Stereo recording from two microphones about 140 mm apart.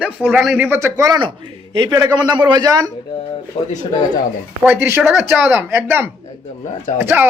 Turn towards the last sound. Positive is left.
turn(degrees=-15)  # may be behind; listen again after turning